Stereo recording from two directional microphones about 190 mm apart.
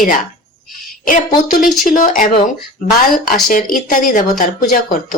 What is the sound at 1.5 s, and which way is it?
Speech, 45° left (ahead or behind).